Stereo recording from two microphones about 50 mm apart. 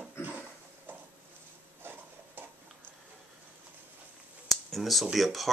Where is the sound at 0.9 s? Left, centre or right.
Right.